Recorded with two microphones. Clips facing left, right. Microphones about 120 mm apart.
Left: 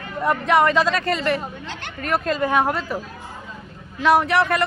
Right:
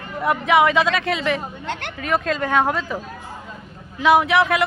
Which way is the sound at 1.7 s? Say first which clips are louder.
Right 5 dB; 60° right (ahead or behind).